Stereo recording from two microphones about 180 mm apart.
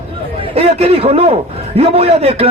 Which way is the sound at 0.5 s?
35° right (ahead or behind).